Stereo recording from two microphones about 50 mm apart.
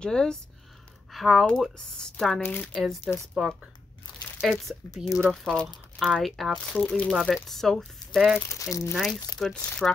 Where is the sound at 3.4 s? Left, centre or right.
Centre.